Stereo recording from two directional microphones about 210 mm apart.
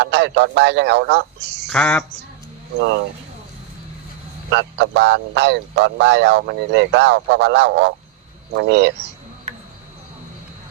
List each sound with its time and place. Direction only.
0.0 s speech: 55° right (ahead or behind)
1.7 s a sound: 5° left (ahead or behind)
4.5 s speech: 55° right (ahead or behind)